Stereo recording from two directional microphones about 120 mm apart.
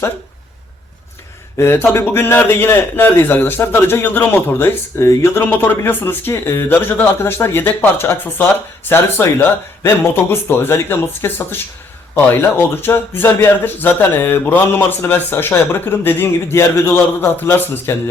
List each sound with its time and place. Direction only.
1.5 s a man's voice: 20° left (ahead or behind)